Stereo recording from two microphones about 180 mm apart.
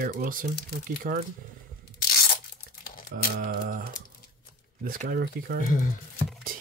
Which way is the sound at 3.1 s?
55° right (ahead or behind).